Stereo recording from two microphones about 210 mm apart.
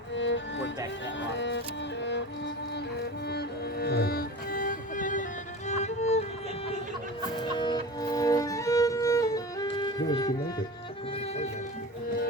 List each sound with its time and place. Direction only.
0.1 s music: 60° left (ahead or behind); by 6.2 s 30° left (ahead or behind)
7.5 s music: 20° left (ahead or behind)